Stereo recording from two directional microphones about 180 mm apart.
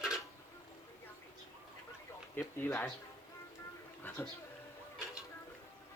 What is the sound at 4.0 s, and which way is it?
Music, 15° left (ahead or behind).